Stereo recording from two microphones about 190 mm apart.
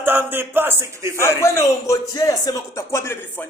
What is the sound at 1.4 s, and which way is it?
A man's voice, 15° left (ahead or behind).